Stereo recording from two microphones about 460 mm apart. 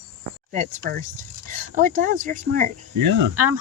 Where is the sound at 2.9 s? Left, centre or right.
Right.